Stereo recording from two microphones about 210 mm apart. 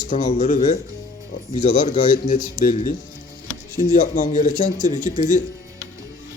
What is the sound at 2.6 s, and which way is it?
Speech, 35° left (ahead or behind).